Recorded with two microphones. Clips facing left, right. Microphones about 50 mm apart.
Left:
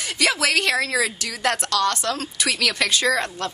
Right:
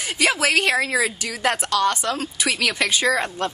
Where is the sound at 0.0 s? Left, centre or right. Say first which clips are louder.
Right 1 dB; centre.